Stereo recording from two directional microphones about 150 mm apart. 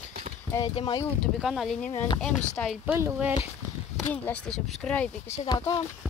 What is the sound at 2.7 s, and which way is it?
Speech, 10° right (ahead or behind).